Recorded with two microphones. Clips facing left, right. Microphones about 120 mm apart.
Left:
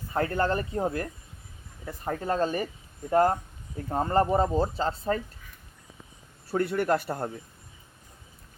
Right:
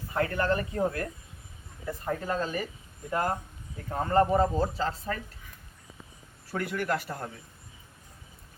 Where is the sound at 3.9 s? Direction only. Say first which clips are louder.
Even; 30° left (ahead or behind).